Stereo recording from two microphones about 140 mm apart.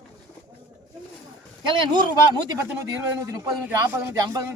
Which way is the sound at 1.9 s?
30° right (ahead or behind).